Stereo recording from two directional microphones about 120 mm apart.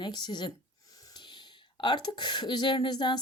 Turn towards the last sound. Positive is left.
turn(degrees=35)  # may be behind; listen again after turning